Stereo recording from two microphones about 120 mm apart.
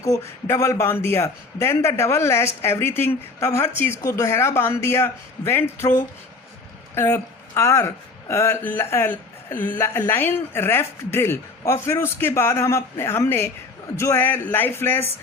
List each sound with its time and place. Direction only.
0.0 s speech: 25° left (ahead or behind)